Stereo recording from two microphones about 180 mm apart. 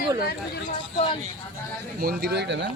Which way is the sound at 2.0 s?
60° right (ahead or behind).